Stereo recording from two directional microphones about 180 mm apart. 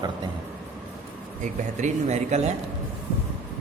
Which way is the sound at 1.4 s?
40° right (ahead or behind).